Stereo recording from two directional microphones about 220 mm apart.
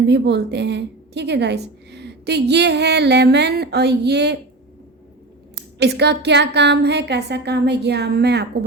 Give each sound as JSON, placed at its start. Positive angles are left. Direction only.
{"t": 0.0, "sound": "a woman's voice", "side_deg": -50}
{"t": 5.8, "sound": "a woman's voice", "side_deg": -50}